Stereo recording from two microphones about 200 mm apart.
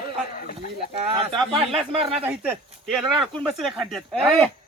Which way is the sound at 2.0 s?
5° right (ahead or behind).